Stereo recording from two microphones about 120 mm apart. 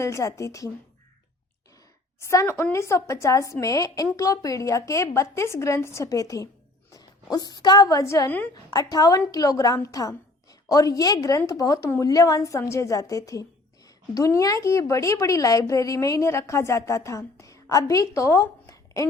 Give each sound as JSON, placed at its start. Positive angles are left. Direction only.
{"t": 0.0, "sound": "a woman's voice", "side_deg": 25}
{"t": 2.2, "sound": "a woman's voice", "side_deg": 25}